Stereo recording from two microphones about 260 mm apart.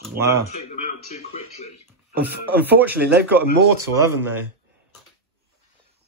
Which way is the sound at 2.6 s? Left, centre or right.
Centre.